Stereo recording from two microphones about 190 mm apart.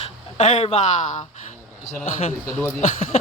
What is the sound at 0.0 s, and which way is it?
Speech, 35° left (ahead or behind).